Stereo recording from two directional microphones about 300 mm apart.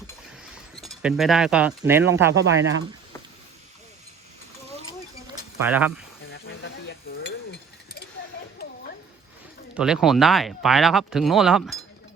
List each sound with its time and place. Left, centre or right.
0.8 s speech: centre
2.3 s speech: right
5.5 s speech: centre
9.7 s speech: centre